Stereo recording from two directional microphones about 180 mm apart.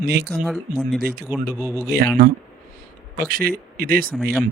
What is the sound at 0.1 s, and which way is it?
Speech, 65° right (ahead or behind).